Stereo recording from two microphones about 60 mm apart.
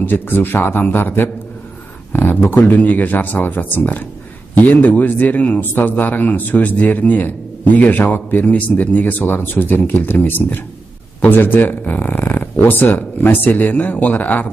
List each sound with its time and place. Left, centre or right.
0.0 s speech: left